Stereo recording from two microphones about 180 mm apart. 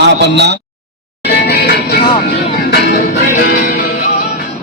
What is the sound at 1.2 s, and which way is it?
Music, 65° left (ahead or behind).